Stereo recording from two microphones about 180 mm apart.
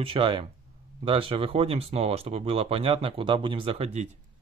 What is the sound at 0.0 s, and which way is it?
Speech, 30° right (ahead or behind).